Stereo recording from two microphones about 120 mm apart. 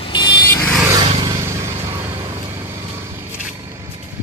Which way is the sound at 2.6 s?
25° right (ahead or behind).